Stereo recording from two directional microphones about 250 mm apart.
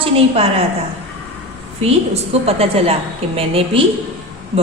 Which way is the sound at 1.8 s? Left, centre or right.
Right.